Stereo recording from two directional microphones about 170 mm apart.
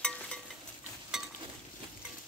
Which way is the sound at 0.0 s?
5° left (ahead or behind).